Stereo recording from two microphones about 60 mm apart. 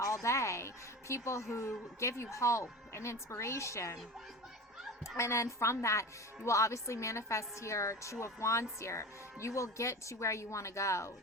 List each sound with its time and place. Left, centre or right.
0.0 s speech: left
5.1 s a woman's voice: left